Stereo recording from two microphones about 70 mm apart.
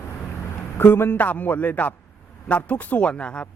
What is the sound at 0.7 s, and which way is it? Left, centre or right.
A man's voice, left.